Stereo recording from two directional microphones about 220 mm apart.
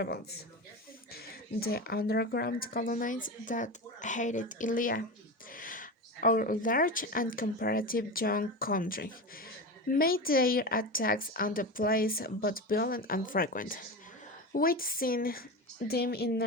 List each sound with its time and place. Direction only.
1.1 s a woman's voice: 45° left (ahead or behind)